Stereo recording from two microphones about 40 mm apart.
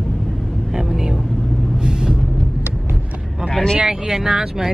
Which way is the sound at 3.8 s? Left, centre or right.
Centre.